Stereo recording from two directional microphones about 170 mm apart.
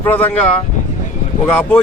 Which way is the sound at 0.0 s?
10° left (ahead or behind).